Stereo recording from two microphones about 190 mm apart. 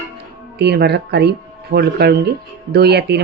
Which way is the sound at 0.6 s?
60° right (ahead or behind).